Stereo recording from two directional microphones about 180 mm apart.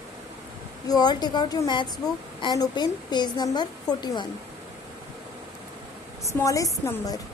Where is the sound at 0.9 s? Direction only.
25° left (ahead or behind).